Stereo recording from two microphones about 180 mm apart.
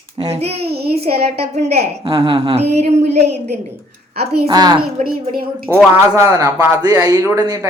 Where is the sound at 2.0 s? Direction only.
30° right (ahead or behind).